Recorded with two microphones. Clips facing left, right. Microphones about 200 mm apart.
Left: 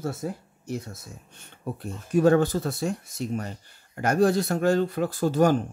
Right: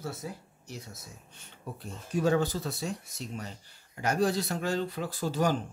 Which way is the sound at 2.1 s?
55° left (ahead or behind).